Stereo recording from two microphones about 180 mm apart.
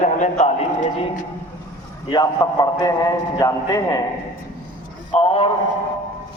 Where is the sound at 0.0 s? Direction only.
40° left (ahead or behind).